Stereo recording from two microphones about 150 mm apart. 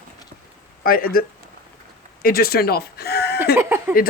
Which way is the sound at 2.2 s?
85° left.